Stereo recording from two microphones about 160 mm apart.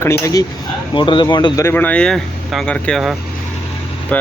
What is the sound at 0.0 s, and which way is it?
Speech, 20° left (ahead or behind).